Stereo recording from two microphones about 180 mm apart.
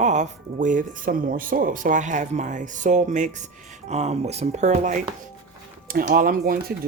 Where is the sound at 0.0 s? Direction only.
40° right (ahead or behind).